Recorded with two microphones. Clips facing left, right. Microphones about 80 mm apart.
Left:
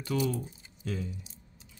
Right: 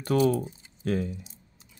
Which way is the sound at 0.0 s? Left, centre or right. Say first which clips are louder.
Right 7 dB; right.